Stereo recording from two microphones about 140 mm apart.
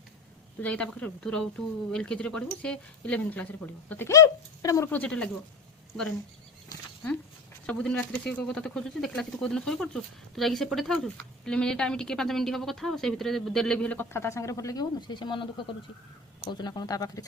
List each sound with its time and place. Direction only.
0.6 s speech: 10° left (ahead or behind)
4.9 s speech: 10° left (ahead or behind)
7.7 s speech: 10° left (ahead or behind); by 17.2 s 25° left (ahead or behind)